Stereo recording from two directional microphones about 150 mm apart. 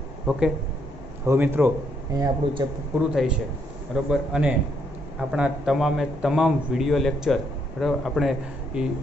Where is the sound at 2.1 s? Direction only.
25° right (ahead or behind).